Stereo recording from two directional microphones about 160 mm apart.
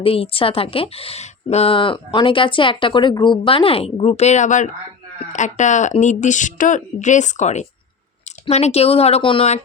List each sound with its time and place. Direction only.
0.0 s speech: 35° left (ahead or behind)